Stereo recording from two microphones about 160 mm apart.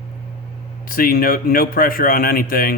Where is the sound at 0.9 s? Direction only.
65° left (ahead or behind).